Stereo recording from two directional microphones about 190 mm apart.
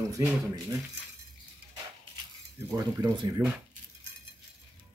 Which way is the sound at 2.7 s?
20° right (ahead or behind).